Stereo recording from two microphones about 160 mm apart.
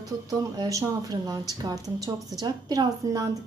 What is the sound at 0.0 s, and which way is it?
A woman's voice, 20° right (ahead or behind).